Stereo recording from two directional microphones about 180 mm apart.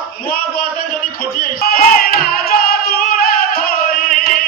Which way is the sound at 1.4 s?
55° left (ahead or behind).